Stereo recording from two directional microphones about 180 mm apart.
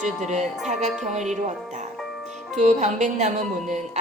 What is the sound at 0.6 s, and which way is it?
Speech, 40° right (ahead or behind).